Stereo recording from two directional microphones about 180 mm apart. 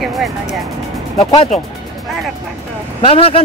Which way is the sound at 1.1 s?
30° left (ahead or behind).